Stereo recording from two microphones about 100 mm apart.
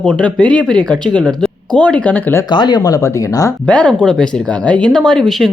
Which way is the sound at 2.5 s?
45° left (ahead or behind).